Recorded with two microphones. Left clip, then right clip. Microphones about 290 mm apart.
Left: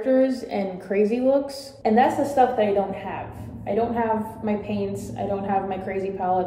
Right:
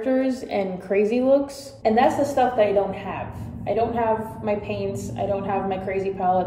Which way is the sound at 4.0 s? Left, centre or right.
Centre.